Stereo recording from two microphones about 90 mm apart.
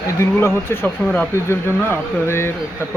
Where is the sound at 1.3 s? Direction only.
30° left (ahead or behind).